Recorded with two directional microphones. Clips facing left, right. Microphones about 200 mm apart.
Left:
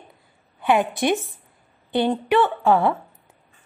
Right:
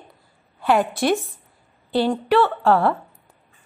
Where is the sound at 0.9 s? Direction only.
15° left (ahead or behind).